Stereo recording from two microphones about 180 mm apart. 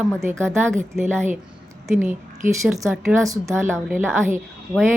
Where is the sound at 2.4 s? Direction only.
45° right (ahead or behind).